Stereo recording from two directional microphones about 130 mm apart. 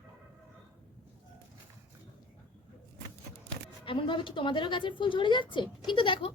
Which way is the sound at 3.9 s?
40° left (ahead or behind).